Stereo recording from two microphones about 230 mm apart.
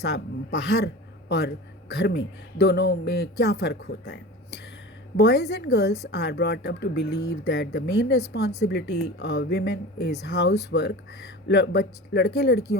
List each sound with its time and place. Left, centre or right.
0.0 s speech: left